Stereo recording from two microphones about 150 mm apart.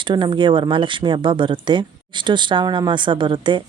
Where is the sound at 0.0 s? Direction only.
30° right (ahead or behind).